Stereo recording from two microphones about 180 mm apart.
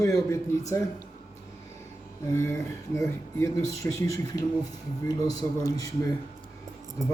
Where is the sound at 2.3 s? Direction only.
15° left (ahead or behind).